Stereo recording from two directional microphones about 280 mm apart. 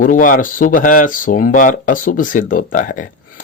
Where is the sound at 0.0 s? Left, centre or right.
Left.